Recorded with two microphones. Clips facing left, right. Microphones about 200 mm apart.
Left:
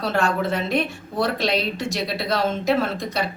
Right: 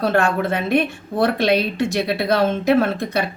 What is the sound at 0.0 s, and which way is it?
A woman's voice, 55° right (ahead or behind).